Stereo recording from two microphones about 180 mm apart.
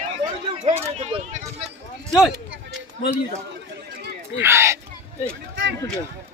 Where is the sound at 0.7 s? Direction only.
40° right (ahead or behind).